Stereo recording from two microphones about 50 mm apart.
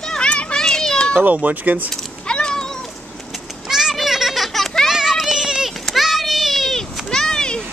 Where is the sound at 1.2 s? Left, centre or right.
Right.